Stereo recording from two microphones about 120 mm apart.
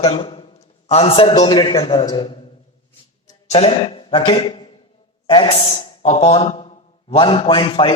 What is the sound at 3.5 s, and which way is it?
A man's voice, 50° left (ahead or behind).